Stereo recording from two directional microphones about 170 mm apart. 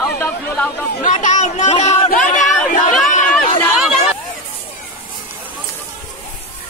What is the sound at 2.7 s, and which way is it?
Chatter, 50° left (ahead or behind).